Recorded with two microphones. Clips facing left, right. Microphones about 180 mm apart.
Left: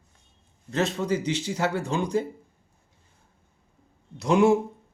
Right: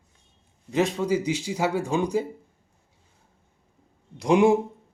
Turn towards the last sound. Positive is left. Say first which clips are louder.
# right 1 dB
turn(degrees=-15)  # may be behind; listen again after turning